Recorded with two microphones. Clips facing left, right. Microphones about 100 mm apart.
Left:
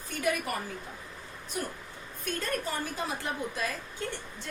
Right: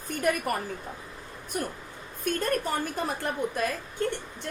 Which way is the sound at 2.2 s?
55° right (ahead or behind).